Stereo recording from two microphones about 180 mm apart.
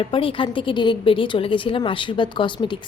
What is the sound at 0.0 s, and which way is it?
A woman's voice, 30° left (ahead or behind).